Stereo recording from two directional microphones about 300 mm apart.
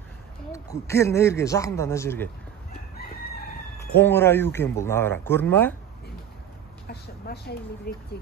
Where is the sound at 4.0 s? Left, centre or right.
Centre.